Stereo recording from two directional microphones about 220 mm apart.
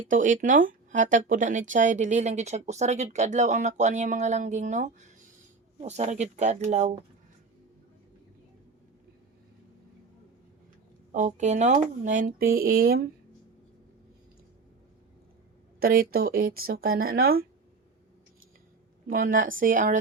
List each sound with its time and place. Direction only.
0.1 s speech: 35° right (ahead or behind)
11.1 s speech: 35° right (ahead or behind)
15.8 s speech: 40° right (ahead or behind)
19.1 s speech: 40° right (ahead or behind)